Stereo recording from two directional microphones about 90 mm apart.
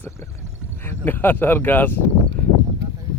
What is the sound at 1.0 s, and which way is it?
Speech, 20° left (ahead or behind).